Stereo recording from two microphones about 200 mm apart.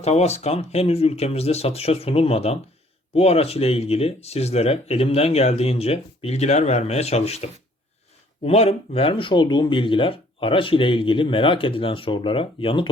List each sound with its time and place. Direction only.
0.0 s speech: 35° left (ahead or behind)